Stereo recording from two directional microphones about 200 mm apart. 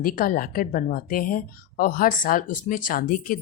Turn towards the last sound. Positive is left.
turn(degrees=45)  # may be behind; listen again after turning